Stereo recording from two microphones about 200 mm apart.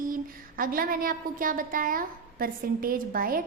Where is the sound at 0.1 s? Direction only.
45° right (ahead or behind).